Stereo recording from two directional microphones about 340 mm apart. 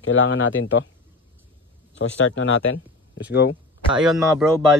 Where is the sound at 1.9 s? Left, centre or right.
Left.